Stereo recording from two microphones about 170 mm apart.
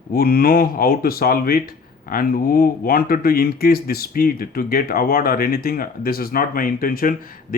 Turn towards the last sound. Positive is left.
turn(degrees=55)  # may be behind; listen again after turning